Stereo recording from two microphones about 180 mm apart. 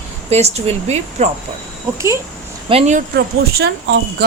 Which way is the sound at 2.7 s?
40° right (ahead or behind).